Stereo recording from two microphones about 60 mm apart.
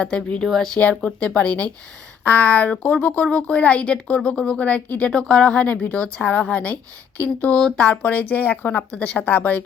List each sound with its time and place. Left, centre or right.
0.0 s speech: centre
0.8 s a woman's voice: left
7.8 s speech: left